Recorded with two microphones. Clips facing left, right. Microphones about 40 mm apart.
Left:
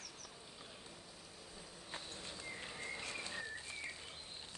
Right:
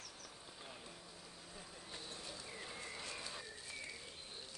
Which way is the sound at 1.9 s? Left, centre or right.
Left.